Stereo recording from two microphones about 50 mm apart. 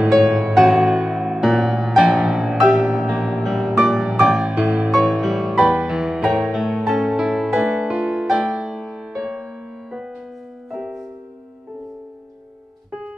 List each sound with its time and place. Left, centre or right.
0.1 s music: centre